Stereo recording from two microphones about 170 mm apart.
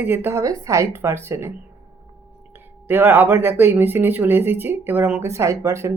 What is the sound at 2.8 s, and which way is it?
Speech, 10° right (ahead or behind).